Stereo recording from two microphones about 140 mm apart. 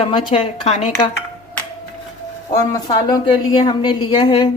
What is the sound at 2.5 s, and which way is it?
A woman's voice, 30° left (ahead or behind).